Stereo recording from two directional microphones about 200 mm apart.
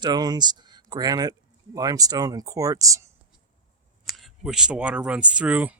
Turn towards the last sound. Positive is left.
turn(degrees=-5)  # may be behind; listen again after turning